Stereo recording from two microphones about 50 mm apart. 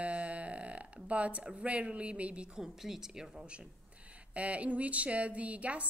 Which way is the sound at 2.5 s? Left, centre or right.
Centre.